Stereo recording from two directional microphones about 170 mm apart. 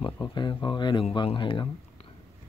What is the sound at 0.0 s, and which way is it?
Speech, 25° left (ahead or behind).